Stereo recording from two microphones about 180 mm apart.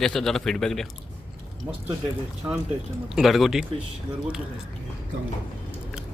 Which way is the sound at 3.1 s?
Centre (ahead or behind).